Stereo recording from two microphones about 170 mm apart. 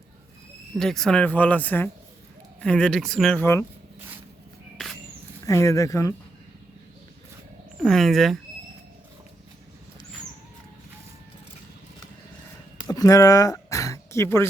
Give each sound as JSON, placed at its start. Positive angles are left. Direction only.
{"t": 0.8, "sound": "speech", "side_deg": 5}
{"t": 3.4, "sound": "speech", "side_deg": 15}
{"t": 5.5, "sound": "speech", "side_deg": 20}
{"t": 7.8, "sound": "speech", "side_deg": 0}
{"t": 12.9, "sound": "a sound", "side_deg": 20}